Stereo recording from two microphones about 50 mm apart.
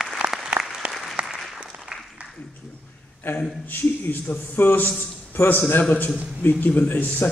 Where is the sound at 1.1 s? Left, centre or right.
Centre.